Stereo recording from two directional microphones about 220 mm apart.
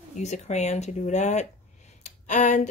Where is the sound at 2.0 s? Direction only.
35° left (ahead or behind).